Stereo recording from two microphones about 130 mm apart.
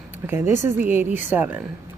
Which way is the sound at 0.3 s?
20° right (ahead or behind).